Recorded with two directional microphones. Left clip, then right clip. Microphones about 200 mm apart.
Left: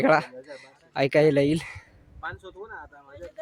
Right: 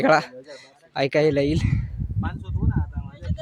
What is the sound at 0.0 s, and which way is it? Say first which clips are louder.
A man's voice: right 2 dB; 5° right (ahead or behind).